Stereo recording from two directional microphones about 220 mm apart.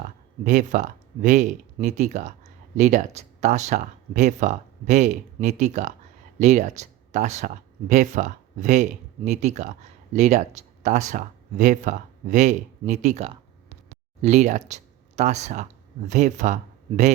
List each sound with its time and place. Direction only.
0.4 s speech: 35° right (ahead or behind)